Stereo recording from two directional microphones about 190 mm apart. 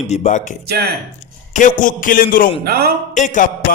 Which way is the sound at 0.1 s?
35° left (ahead or behind).